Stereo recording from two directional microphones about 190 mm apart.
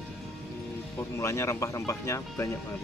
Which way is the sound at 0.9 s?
15° left (ahead or behind).